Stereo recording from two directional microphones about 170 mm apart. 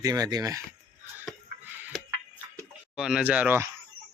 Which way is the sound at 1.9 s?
Centre (ahead or behind).